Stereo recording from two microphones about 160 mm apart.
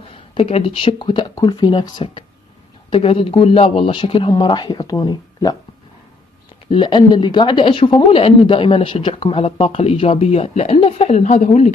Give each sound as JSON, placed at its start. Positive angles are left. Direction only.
{"t": 0.1, "sound": "speech", "side_deg": 35}
{"t": 6.7, "sound": "speech", "side_deg": 30}